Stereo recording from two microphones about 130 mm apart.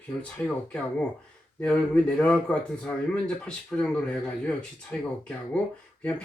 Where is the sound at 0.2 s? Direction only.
10° left (ahead or behind).